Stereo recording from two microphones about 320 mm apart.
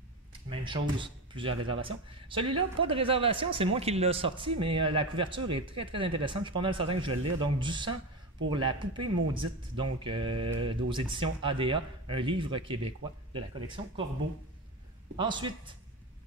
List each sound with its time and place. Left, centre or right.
0.5 s speech: centre
15.1 s speech: centre